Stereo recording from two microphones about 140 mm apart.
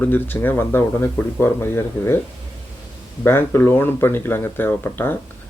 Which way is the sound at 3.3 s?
15° left (ahead or behind).